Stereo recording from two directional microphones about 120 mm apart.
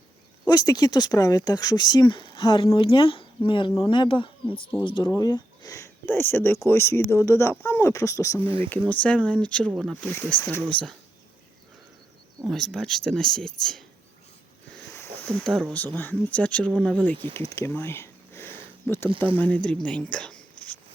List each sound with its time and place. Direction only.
0.4 s speech: 35° left (ahead or behind)
5.1 s speech: 30° left (ahead or behind)
8.4 s speech: 50° right (ahead or behind)
8.9 s speech: 10° left (ahead or behind)
9.7 s speech: centre (ahead or behind)
10.0 s speech: 15° left (ahead or behind)
12.5 s speech: 5° left (ahead or behind)
15.3 s speech: centre (ahead or behind)
16.0 s speech: 15° left (ahead or behind)
17.5 s speech: 20° left (ahead or behind)